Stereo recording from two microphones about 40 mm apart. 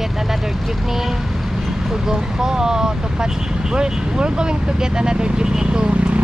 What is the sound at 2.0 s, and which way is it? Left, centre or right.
Speech, centre.